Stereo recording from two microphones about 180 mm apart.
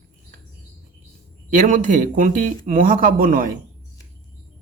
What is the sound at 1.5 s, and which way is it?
A man's voice, 45° right (ahead or behind).